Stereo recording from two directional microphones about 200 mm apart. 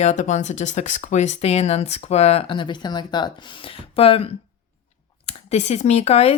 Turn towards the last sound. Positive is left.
turn(degrees=30)  # may be behind; listen again after turning